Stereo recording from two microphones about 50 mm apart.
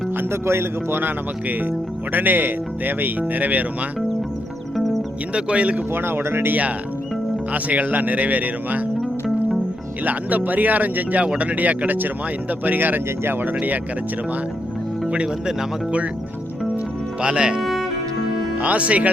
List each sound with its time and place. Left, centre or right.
0.2 s speech: right
5.3 s speech: right
5.9 s speech: right
6.5 s speech: right
10.0 s speech: right
15.1 s speech: right
17.2 s speech: centre
17.6 s music: centre
18.6 s speech: right